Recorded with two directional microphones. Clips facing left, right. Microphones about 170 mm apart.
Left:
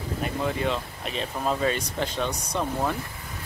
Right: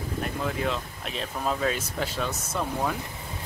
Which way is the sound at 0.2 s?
Centre (ahead or behind).